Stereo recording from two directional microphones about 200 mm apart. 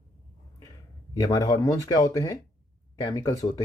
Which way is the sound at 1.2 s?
20° left (ahead or behind).